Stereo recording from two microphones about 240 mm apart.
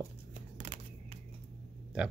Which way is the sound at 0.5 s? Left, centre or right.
Right.